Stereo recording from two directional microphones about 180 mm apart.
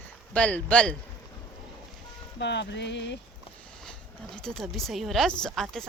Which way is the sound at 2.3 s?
75° left (ahead or behind).